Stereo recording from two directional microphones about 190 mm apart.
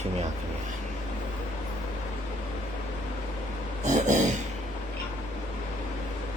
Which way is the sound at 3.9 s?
40° right (ahead or behind).